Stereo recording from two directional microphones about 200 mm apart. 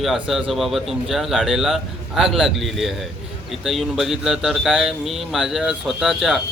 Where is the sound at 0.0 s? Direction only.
Centre (ahead or behind).